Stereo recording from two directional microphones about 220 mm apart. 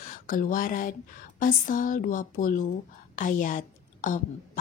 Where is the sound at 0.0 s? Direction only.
40° left (ahead or behind).